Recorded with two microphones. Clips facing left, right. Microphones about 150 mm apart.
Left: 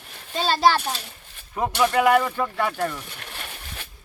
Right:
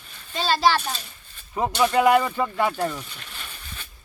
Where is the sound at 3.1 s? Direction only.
65° left (ahead or behind).